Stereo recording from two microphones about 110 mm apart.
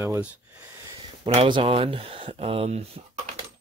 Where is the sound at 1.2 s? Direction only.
60° right (ahead or behind).